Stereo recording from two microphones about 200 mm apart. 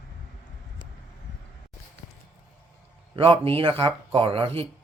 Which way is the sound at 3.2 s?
30° right (ahead or behind).